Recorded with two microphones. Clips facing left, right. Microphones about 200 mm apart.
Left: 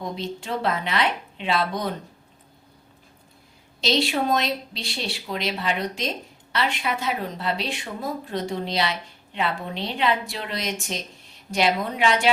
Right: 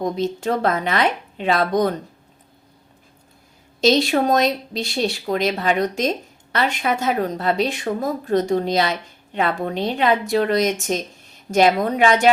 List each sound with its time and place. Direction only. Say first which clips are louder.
0.0 s speech: right 9 dB; 45° right (ahead or behind)
3.8 s speech: right 7 dB; 45° right (ahead or behind)